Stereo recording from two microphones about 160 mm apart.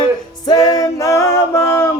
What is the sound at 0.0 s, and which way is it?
Music, 25° left (ahead or behind).